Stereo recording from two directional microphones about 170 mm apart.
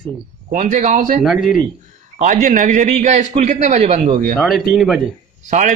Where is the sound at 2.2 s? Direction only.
50° right (ahead or behind).